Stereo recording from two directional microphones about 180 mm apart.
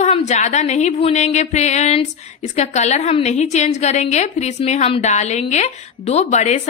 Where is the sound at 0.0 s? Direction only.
40° left (ahead or behind).